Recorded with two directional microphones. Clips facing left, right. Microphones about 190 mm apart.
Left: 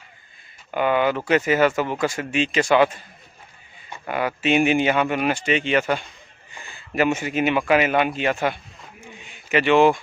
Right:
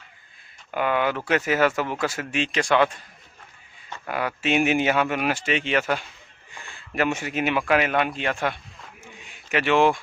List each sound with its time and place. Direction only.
0.7 s speech: centre (ahead or behind)
4.1 s speech: centre (ahead or behind)
9.0 s a sound: centre (ahead or behind)